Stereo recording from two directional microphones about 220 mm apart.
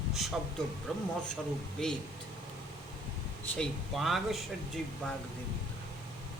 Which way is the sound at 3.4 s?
5° left (ahead or behind).